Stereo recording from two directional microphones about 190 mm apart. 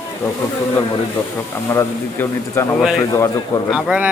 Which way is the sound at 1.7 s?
15° left (ahead or behind).